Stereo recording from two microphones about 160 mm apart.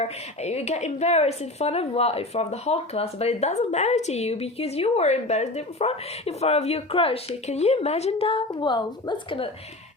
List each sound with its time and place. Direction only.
0.0 s speech: 40° left (ahead or behind)